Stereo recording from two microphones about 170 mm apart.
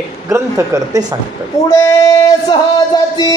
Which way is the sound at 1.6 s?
20° left (ahead or behind).